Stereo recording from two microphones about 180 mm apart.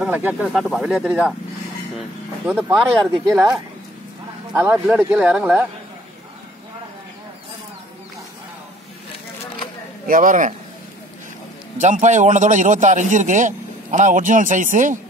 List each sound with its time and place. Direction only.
0.0 s speech: 10° right (ahead or behind)
4.6 s speech: 10° right (ahead or behind)
10.0 s a man's voice: 50° right (ahead or behind)
11.8 s a man's voice: 40° right (ahead or behind)